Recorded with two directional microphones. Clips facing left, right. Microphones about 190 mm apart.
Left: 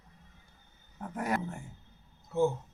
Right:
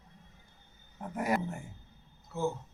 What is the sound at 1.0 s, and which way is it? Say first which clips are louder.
Speech: right 1 dB; 5° right (ahead or behind).